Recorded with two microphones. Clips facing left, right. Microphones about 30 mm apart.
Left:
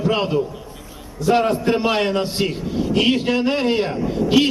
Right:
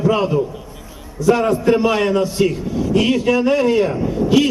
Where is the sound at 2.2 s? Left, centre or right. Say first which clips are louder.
Right 5 dB; left.